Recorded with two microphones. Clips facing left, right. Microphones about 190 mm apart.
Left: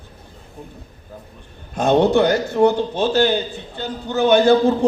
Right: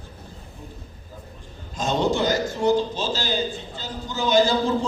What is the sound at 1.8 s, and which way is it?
A man's voice, 60° left (ahead or behind).